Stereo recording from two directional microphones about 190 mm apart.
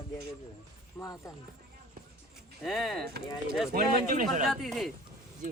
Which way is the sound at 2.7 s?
Centre (ahead or behind).